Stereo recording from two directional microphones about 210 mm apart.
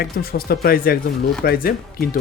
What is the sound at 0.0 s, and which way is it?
Speech, 45° left (ahead or behind).